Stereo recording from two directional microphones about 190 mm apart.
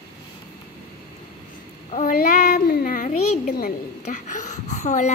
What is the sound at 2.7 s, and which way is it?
A woman's voice, 45° left (ahead or behind).